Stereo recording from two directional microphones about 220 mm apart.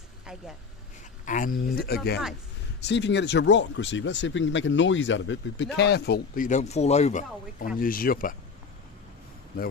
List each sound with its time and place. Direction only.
1.2 s speech: 35° left (ahead or behind)